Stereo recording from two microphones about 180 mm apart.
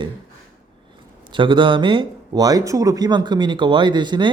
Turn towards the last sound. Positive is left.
turn(degrees=-25)  # may be behind; listen again after turning